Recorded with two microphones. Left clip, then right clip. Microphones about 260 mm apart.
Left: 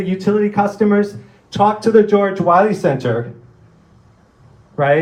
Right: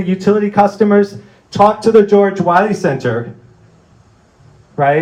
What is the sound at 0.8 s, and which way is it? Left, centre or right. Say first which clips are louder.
Speech: right 4 dB; right.